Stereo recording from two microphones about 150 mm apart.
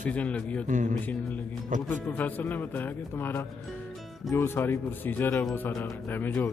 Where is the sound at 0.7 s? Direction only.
55° right (ahead or behind).